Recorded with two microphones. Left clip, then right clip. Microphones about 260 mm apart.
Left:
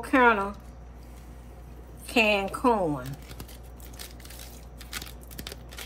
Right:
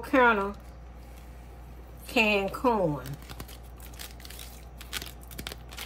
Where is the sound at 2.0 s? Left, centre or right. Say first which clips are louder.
Left 2 dB; left.